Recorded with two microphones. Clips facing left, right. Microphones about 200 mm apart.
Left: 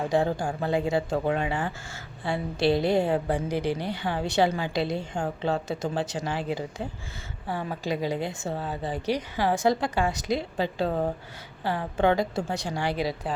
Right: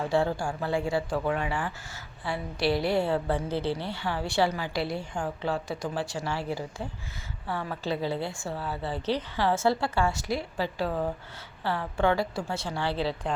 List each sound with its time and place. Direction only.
0.0 s a woman's voice: 15° left (ahead or behind)